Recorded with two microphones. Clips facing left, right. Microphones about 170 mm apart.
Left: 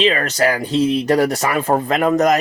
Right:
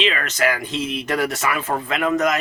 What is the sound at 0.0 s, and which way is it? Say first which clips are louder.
Speech: left 5 dB; 35° left (ahead or behind).